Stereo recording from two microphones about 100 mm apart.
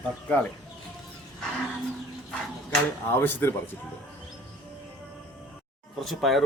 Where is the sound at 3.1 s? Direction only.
20° left (ahead or behind).